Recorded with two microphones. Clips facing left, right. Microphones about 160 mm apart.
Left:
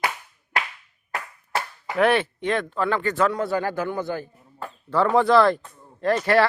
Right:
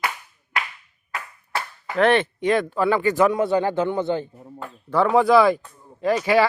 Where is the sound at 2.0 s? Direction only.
10° left (ahead or behind).